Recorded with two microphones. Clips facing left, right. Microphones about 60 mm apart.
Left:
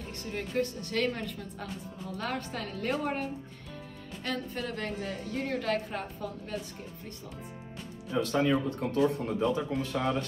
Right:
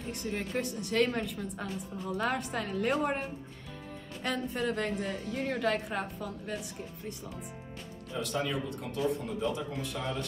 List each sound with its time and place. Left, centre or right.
0.0 s a woman's voice: centre
8.1 s speech: left